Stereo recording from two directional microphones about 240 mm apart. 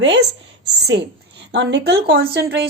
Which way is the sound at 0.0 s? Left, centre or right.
Right.